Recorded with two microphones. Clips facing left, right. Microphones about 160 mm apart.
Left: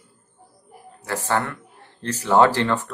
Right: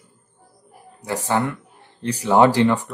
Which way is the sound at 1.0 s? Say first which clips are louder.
Right 2 dB; 15° right (ahead or behind).